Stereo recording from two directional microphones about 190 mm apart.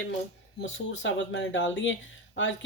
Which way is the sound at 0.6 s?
75° left (ahead or behind).